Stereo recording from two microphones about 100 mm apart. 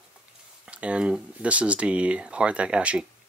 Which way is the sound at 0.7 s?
10° right (ahead or behind).